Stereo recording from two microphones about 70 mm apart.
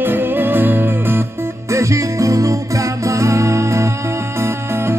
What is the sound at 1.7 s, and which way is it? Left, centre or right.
Music, right.